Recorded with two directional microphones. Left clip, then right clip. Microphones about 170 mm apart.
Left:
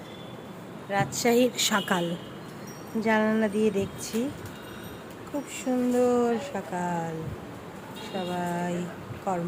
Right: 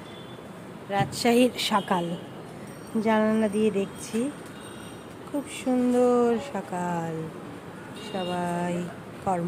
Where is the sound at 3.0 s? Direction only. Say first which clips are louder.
Right 1 dB; 10° right (ahead or behind).